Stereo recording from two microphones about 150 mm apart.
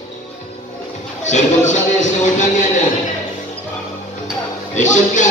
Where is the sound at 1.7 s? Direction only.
55° left (ahead or behind).